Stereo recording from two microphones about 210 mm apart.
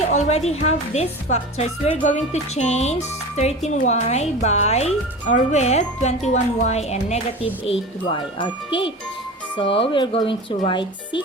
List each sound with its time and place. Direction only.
0.1 s a woman's voice: 30° left (ahead or behind)